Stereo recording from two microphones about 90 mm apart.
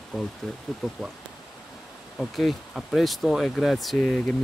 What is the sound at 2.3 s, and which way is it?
Speech, centre (ahead or behind).